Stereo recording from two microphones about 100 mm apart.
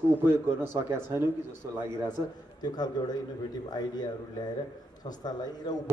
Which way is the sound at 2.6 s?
40° left (ahead or behind).